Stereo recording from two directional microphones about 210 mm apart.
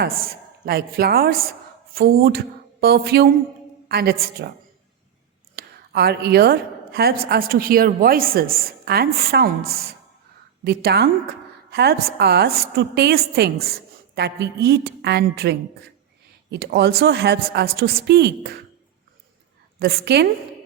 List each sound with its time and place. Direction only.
0.0 s a woman's voice: 45° right (ahead or behind)
5.5 s a woman's voice: 45° right (ahead or behind)
19.8 s a woman's voice: 45° right (ahead or behind)